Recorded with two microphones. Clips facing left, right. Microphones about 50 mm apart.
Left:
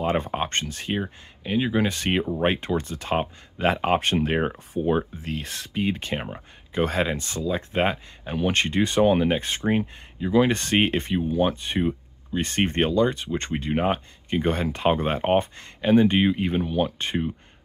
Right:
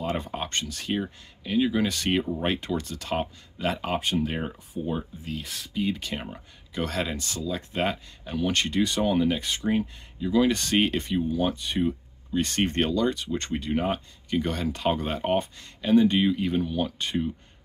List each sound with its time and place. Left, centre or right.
0.0 s speech: left
4.0 s speech: left
4.7 s speech: left
5.8 s speech: left